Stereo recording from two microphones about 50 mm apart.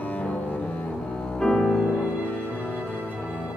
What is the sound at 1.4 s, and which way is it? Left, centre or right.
Music, centre.